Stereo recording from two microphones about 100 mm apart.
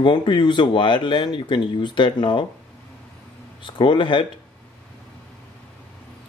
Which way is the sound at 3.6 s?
50° left (ahead or behind).